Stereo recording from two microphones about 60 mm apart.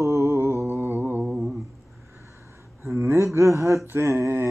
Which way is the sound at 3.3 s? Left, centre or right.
Right.